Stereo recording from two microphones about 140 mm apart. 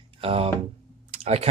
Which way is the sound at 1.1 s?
50° right (ahead or behind).